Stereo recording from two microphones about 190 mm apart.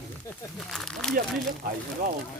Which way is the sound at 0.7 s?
5° left (ahead or behind).